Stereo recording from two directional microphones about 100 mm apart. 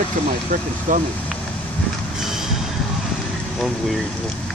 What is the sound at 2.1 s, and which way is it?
Vehicle, 5° right (ahead or behind).